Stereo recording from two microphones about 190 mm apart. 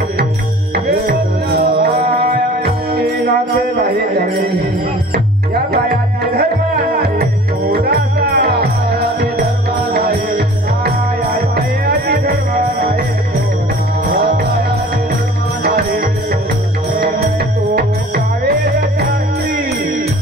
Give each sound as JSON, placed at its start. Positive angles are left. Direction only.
{"t": 0.7, "sound": "music", "side_deg": -55}
{"t": 14.1, "sound": "music", "side_deg": -55}
{"t": 15.6, "sound": "music", "side_deg": -55}
{"t": 17.7, "sound": "music", "side_deg": -55}